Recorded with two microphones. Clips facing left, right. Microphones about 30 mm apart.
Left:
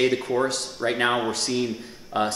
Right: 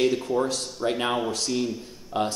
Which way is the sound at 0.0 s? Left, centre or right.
Left.